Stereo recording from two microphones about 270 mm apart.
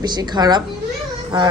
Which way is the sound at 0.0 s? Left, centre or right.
Centre.